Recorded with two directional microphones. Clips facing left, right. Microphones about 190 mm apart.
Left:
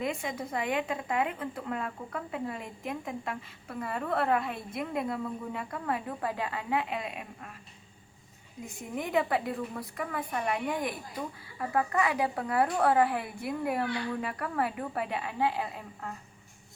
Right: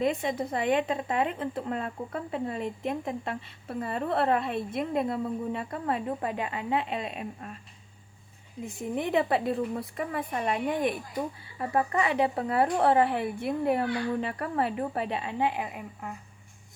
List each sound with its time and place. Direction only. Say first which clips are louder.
0.0 s a woman's voice: right 6 dB; 25° right (ahead or behind)
8.6 s a woman's voice: right 5 dB; 30° right (ahead or behind)